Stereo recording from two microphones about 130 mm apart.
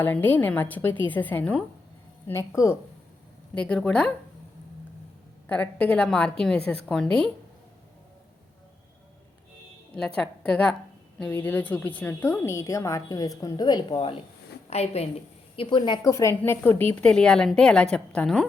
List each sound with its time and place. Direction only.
0.0 s a woman's voice: 15° left (ahead or behind)
3.5 s a woman's voice: 10° left (ahead or behind)
5.5 s a woman's voice: 10° left (ahead or behind)
9.9 s a woman's voice: 5° left (ahead or behind); by 14.2 s 40° left (ahead or behind)
14.7 s a woman's voice: 55° left (ahead or behind)
15.5 s a woman's voice: 40° left (ahead or behind)
16.0 s a woman's voice: 25° left (ahead or behind); by 18.4 s 10° left (ahead or behind)